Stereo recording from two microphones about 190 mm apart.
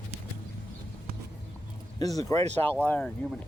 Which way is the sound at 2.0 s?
20° left (ahead or behind).